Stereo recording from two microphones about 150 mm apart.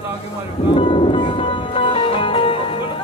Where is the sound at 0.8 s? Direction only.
35° left (ahead or behind).